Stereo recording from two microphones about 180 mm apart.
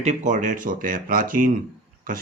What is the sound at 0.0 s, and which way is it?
Speech, 40° right (ahead or behind).